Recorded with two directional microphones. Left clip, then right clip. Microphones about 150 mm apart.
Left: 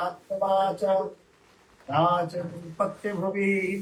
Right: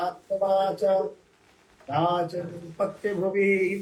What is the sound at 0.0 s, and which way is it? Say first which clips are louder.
Speech: right 1 dB; 35° right (ahead or behind).